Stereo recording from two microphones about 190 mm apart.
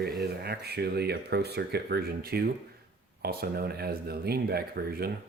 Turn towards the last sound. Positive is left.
turn(degrees=-55)  # may be behind; listen again after turning